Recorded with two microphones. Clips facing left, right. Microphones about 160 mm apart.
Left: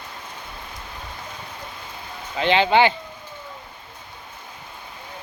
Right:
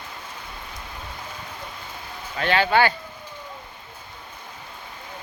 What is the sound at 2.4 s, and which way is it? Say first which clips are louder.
Speech: left 3 dB; 20° left (ahead or behind).